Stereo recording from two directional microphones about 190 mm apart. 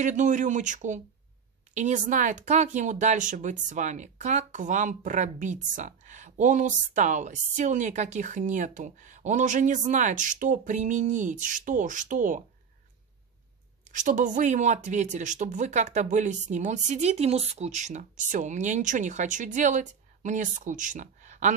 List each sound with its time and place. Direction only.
0.0 s speech: 40° right (ahead or behind)
13.9 s speech: 40° right (ahead or behind)